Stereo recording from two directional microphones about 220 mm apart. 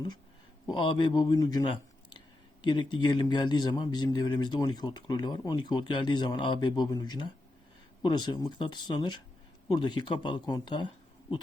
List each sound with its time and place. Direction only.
0.7 s speech: 20° left (ahead or behind)